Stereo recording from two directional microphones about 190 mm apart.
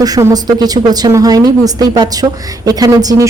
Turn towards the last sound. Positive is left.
turn(degrees=-20)  # may be behind; listen again after turning